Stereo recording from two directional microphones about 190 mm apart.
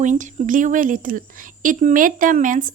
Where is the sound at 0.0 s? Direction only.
40° right (ahead or behind).